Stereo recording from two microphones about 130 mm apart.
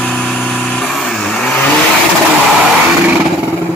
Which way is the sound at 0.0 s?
5° left (ahead or behind).